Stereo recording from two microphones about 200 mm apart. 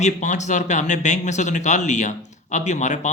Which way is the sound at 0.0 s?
35° left (ahead or behind).